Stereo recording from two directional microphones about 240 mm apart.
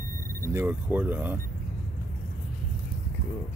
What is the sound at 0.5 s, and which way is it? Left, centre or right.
Speech, centre.